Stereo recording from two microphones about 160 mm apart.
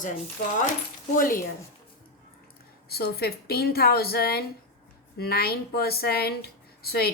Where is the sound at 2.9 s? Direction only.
75° left (ahead or behind).